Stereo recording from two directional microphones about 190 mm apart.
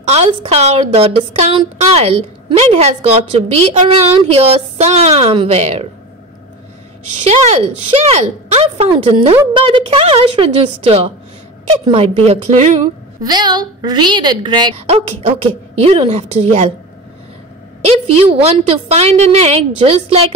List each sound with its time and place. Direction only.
0.1 s a woman's voice: 30° right (ahead or behind)
7.2 s a woman's voice: 35° right (ahead or behind)
13.2 s a woman's voice: 20° right (ahead or behind)
17.8 s a woman's voice: 30° right (ahead or behind)